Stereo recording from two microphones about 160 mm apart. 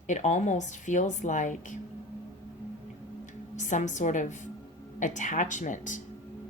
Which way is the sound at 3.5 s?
50° left (ahead or behind).